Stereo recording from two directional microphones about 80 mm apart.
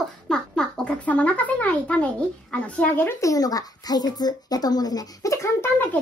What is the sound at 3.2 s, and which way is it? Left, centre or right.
A child's voice, left.